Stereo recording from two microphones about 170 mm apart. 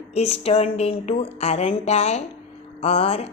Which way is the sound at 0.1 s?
35° left (ahead or behind).